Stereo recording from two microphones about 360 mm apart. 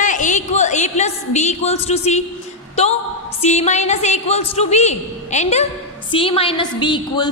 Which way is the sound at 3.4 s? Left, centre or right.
Centre.